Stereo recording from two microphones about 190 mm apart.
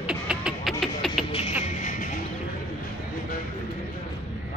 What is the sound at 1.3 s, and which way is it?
Music, 35° left (ahead or behind).